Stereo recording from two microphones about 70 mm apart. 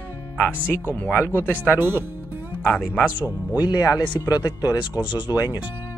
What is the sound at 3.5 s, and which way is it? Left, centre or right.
Speech, left.